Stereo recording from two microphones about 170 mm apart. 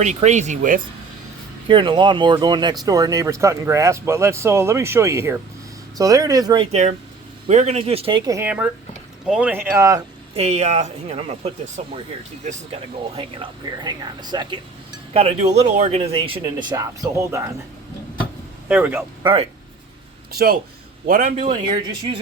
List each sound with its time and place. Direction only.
0.0 s speech: 45° right (ahead or behind)
1.6 s speech: 30° right (ahead or behind)
6.7 s speech: 40° right (ahead or behind)
8.3 s speech: 10° right (ahead or behind)
10.3 s speech: 40° right (ahead or behind)
13.1 s speech: 30° right (ahead or behind)
15.1 s speech: 35° right (ahead or behind); by 17.5 s 20° right (ahead or behind)
18.7 s speech: 10° right (ahead or behind)
19.2 s speech: 30° right (ahead or behind)
20.3 s speech: 60° right (ahead or behind)